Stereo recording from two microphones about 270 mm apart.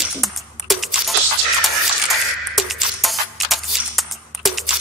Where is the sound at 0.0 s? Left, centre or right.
Centre.